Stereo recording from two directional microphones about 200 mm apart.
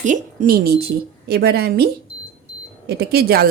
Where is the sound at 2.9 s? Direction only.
55° right (ahead or behind).